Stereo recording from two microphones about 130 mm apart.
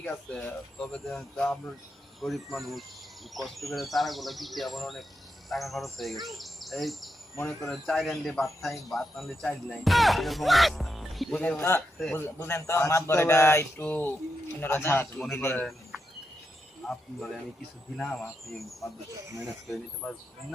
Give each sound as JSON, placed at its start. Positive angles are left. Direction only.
{"t": 0.0, "sound": "speech", "side_deg": 10}
{"t": 16.8, "sound": "speech", "side_deg": 5}
{"t": 19.7, "sound": "speech", "side_deg": 5}